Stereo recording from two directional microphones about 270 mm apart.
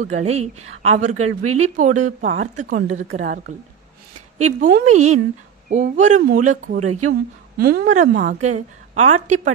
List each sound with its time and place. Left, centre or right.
0.0 s a woman's voice: right
1.1 s speech: right
1.6 s a woman's voice: right
6.8 s speech: right
7.5 s a woman's voice: right